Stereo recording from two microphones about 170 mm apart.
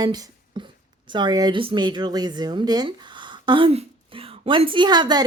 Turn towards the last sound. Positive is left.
turn(degrees=-25)  # may be behind; listen again after turning